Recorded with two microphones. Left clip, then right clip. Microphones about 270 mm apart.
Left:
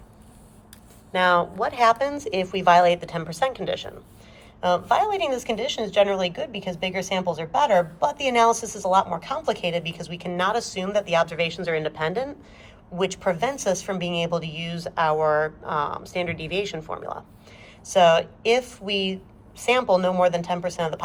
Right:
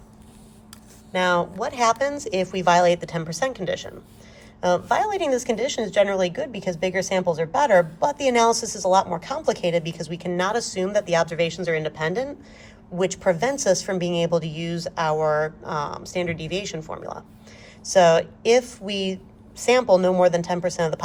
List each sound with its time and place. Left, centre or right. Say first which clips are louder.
1.1 s speech: left 1 dB; centre
8.4 s a woman's voice: even; right
8.8 s speech: right 2 dB; right
13.8 s speech: right 3 dB; right